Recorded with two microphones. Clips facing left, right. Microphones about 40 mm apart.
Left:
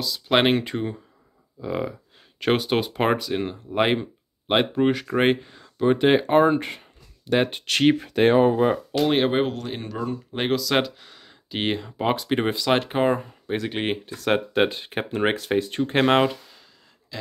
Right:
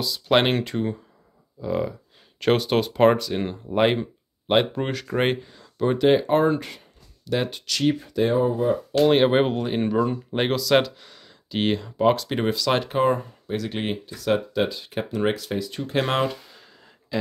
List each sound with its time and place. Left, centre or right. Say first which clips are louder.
0.0 s speech: even; centre
5.9 s speech: even; left
9.0 s speech: right 3 dB; centre
9.3 s speech: right 3 dB; centre
10.4 s speech: right 2 dB; centre; by 13.9 s left
14.0 s speech: even; left
17.1 s a sound: right 9 dB; centre